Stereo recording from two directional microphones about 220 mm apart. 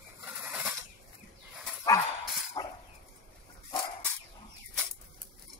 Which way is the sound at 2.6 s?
20° left (ahead or behind).